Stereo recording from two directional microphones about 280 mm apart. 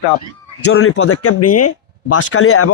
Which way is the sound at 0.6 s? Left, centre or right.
Left.